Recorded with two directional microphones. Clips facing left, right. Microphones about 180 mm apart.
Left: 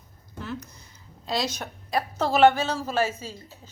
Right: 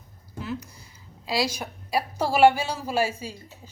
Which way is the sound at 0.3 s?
10° right (ahead or behind).